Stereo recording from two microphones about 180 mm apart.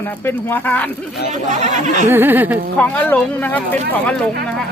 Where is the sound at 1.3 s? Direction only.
40° right (ahead or behind).